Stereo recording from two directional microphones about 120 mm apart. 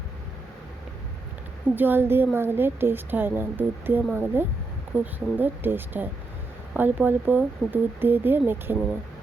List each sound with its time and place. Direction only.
1.7 s a woman's voice: 15° right (ahead or behind)